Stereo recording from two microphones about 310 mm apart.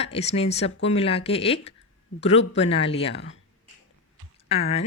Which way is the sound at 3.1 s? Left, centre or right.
Left.